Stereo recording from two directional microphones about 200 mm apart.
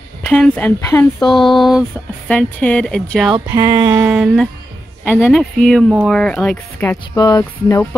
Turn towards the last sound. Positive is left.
turn(degrees=15)  # may be behind; listen again after turning